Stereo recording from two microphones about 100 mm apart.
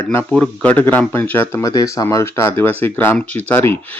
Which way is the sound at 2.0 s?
25° left (ahead or behind).